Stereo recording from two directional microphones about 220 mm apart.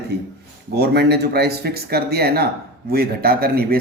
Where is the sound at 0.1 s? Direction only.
50° right (ahead or behind).